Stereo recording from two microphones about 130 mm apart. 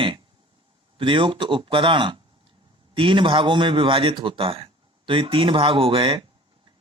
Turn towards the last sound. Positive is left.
turn(degrees=-40)  # may be behind; listen again after turning